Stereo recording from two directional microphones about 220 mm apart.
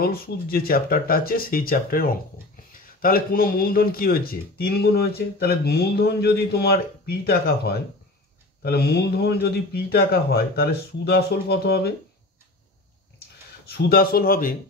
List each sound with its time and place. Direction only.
0.0 s speech: 45° left (ahead or behind)
13.7 s speech: 45° left (ahead or behind)